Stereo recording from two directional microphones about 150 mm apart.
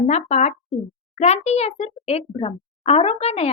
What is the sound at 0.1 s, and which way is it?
A child's voice, 50° left (ahead or behind).